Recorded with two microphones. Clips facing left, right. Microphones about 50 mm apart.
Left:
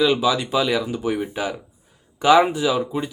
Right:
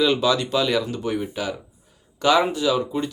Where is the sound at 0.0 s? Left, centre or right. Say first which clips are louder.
Left 1 dB; centre.